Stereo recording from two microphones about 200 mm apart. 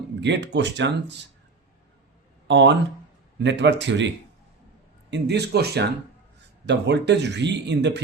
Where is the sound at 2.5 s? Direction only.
60° right (ahead or behind).